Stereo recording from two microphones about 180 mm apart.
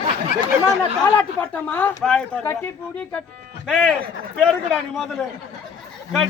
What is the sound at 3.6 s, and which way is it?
Speech, centre (ahead or behind).